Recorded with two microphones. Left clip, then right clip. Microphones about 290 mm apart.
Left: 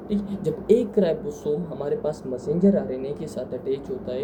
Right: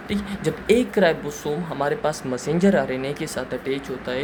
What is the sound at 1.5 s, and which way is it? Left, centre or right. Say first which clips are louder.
Speech: left 1 dB; right.